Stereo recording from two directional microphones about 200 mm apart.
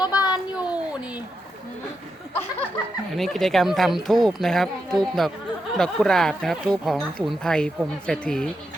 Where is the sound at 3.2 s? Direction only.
Centre (ahead or behind).